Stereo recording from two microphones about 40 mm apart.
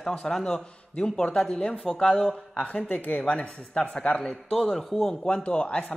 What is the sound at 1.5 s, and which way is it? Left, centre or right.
Speech, left.